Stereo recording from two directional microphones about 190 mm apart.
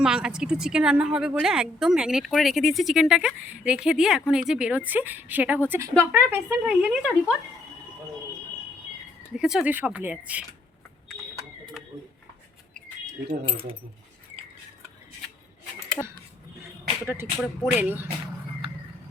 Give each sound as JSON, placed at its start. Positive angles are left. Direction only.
{"t": 0.0, "sound": "a woman's voice", "side_deg": -5}
{"t": 9.3, "sound": "speech", "side_deg": -5}
{"t": 13.4, "sound": "speech", "side_deg": -30}
{"t": 16.0, "sound": "speech", "side_deg": 15}
{"t": 17.1, "sound": "speech", "side_deg": -10}